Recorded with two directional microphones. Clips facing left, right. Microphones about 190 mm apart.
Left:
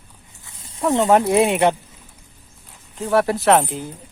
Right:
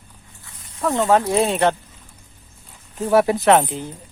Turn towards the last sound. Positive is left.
turn(degrees=5)  # may be behind; listen again after turning